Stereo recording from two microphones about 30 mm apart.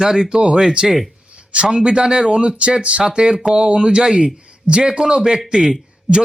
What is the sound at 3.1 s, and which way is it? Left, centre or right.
Speech, right.